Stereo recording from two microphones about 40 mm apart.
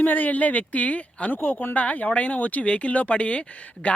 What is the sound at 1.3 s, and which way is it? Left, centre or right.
Speech, left.